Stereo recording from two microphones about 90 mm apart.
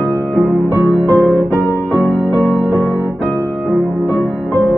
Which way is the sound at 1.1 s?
25° left (ahead or behind).